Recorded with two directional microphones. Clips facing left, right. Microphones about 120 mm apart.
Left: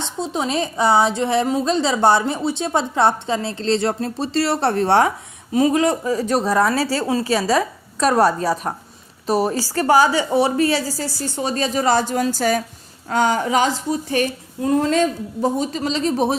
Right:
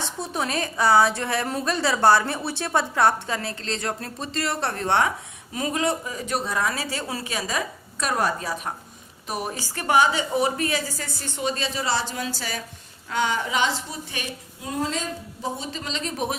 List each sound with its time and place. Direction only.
0.0 s a woman's voice: 20° left (ahead or behind); by 15.4 s 60° left (ahead or behind)
15.5 s a woman's voice: 40° left (ahead or behind)